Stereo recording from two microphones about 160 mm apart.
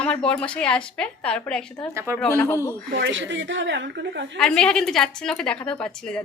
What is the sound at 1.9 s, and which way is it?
Speech, 15° right (ahead or behind).